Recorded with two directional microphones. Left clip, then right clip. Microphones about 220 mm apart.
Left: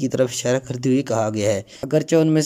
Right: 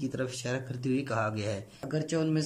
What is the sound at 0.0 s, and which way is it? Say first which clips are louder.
Speech: left 14 dB; 30° left (ahead or behind).